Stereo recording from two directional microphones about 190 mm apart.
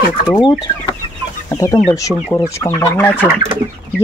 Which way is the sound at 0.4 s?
20° left (ahead or behind).